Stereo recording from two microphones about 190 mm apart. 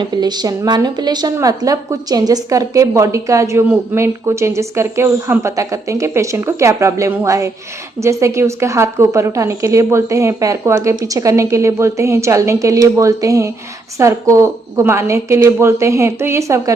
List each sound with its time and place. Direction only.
0.0 s a woman's voice: 20° right (ahead or behind)